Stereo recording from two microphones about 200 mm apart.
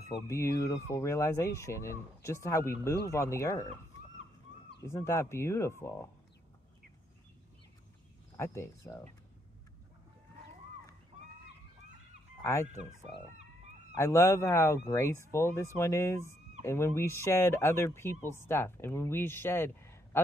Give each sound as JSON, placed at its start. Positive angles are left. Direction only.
{"t": 0.1, "sound": "speech", "side_deg": 15}
{"t": 4.8, "sound": "speech", "side_deg": 15}
{"t": 8.4, "sound": "speech", "side_deg": 15}
{"t": 12.4, "sound": "fowl", "side_deg": 15}
{"t": 13.9, "sound": "speech", "side_deg": 15}